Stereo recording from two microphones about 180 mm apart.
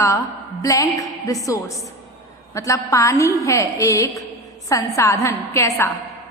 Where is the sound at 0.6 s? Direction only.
20° left (ahead or behind).